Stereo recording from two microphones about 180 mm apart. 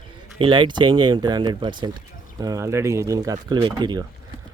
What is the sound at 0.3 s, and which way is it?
Speech, 30° right (ahead or behind).